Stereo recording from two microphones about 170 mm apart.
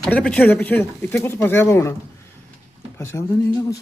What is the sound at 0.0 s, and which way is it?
Speech, 5° left (ahead or behind).